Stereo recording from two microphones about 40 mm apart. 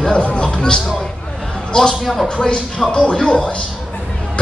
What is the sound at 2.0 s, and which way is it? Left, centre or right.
Speech, centre.